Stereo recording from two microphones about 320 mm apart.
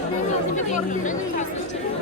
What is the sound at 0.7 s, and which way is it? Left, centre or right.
Speech, left.